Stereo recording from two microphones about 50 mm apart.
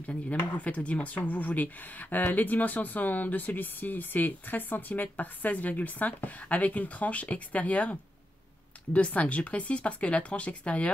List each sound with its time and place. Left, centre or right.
0.0 s speech: left